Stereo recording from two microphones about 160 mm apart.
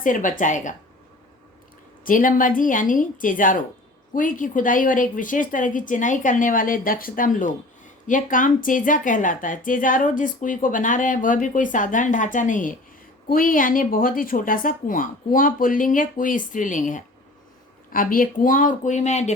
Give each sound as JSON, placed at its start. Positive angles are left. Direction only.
{"t": 0.0, "sound": "speech", "side_deg": 55}
{"t": 2.0, "sound": "a woman's voice", "side_deg": 55}